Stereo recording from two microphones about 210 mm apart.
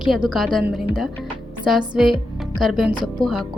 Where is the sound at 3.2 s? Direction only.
20° right (ahead or behind).